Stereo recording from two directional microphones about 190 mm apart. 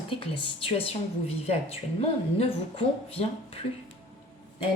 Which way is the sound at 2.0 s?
30° left (ahead or behind).